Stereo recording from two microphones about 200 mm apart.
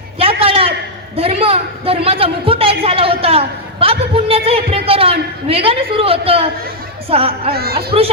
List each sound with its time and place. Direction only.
0.2 s a sound: 30° right (ahead or behind)
1.1 s a woman's voice: 30° right (ahead or behind)
7.5 s a woman's voice: 50° right (ahead or behind)